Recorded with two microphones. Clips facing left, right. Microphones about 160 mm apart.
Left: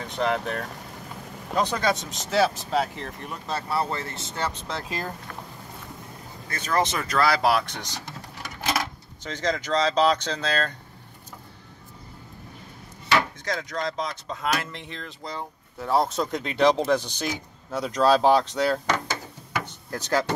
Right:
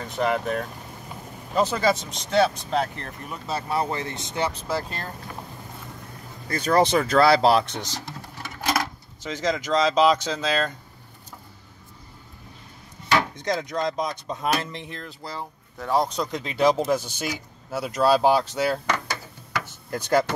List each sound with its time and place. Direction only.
0.0 s speech: centre (ahead or behind)
3.5 s speech: 20° right (ahead or behind)
6.5 s speech: 35° right (ahead or behind)
9.2 s speech: 10° right (ahead or behind)
13.4 s speech: 20° right (ahead or behind)
14.9 s speech: 5° right (ahead or behind)
19.6 s door: 10° right (ahead or behind)